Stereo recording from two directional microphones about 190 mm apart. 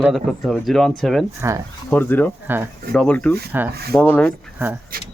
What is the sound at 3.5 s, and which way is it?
Speech, 10° right (ahead or behind).